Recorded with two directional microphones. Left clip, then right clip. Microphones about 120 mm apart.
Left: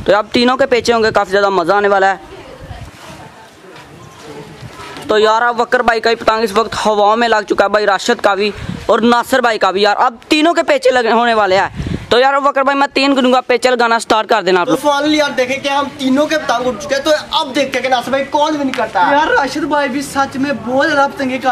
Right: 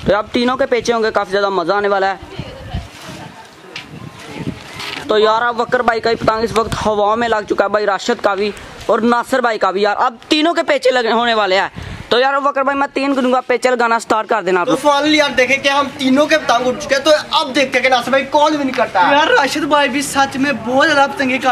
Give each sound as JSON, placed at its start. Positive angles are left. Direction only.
{"t": 0.0, "sound": "speech", "side_deg": 25}
{"t": 5.0, "sound": "speech", "side_deg": 15}
{"t": 14.7, "sound": "speech", "side_deg": 0}